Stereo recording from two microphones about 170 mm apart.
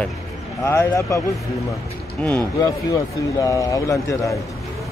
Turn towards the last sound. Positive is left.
turn(degrees=20)  # may be behind; listen again after turning